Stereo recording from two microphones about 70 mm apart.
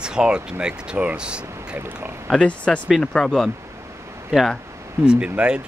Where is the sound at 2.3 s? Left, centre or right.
Centre.